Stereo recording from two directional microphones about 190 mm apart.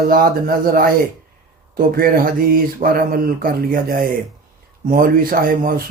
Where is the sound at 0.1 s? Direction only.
50° right (ahead or behind).